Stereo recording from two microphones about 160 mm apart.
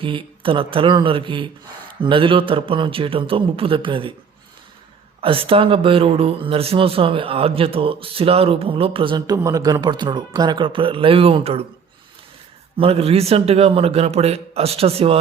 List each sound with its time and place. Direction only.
0.0 s speech: 35° right (ahead or behind)
5.2 s speech: 35° right (ahead or behind)
12.7 s speech: 35° right (ahead or behind)